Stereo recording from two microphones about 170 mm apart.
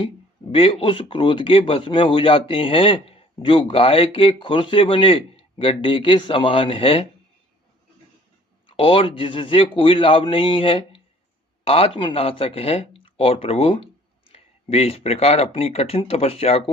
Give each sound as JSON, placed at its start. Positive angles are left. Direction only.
{"t": 0.5, "sound": "a man's voice", "side_deg": 30}
{"t": 8.6, "sound": "a man's voice", "side_deg": 30}